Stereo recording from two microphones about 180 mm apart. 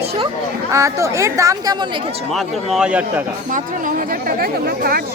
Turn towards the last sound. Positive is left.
turn(degrees=-55)  # may be behind; listen again after turning